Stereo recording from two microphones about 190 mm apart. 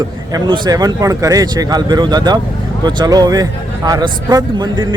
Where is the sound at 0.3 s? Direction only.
20° right (ahead or behind).